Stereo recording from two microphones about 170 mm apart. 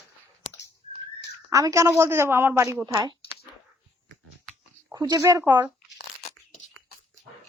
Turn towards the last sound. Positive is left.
turn(degrees=-10)  # may be behind; listen again after turning